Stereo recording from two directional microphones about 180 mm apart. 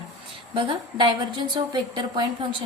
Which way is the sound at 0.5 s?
25° right (ahead or behind).